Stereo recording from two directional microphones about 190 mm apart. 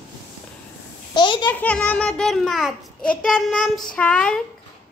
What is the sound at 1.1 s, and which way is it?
Babbling, 25° left (ahead or behind).